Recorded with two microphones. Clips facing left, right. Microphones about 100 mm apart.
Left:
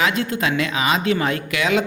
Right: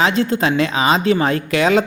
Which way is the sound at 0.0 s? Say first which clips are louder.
Right 4 dB; 30° right (ahead or behind).